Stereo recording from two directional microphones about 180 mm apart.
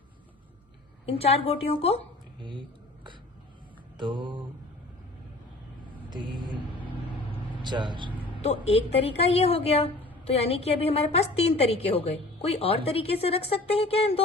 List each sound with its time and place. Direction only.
1.5 s a woman's voice: 35° left (ahead or behind)
2.4 s a sound: 25° right (ahead or behind)
3.9 s mantra: 25° right (ahead or behind)
6.1 s mantra: 25° right (ahead or behind)
7.3 s vehicle: 25° right (ahead or behind)
8.3 s a woman's voice: 35° left (ahead or behind)